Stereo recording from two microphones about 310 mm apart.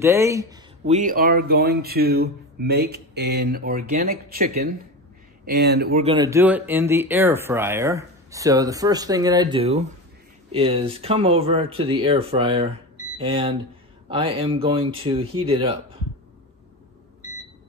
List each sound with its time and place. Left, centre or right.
0.0 s speech: centre
0.8 s speech: right
6.0 s speech: centre